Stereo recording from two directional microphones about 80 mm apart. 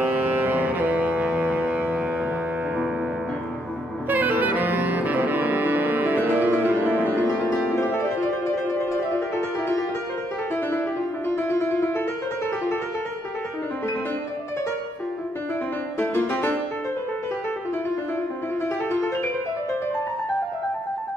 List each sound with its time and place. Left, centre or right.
0.0 s music: right
1.5 s a sound: centre
4.1 s saxophone: right
7.0 s music: right
7.7 s music: left
10.5 s music: left
16.0 s music: left